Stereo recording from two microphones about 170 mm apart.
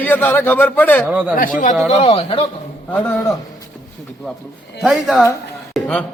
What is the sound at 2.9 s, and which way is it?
Speech, 10° left (ahead or behind).